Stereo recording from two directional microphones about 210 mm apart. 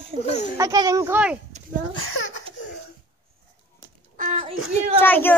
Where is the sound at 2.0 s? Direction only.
75° left (ahead or behind).